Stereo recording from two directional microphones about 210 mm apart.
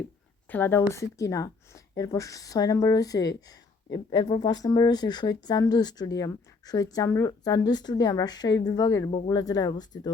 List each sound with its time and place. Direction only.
0.5 s a woman's voice: 10° left (ahead or behind)